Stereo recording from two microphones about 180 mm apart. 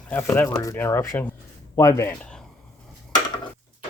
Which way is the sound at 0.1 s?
10° left (ahead or behind).